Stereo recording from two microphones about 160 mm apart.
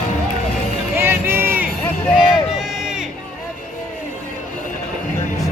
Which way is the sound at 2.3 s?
5° right (ahead or behind).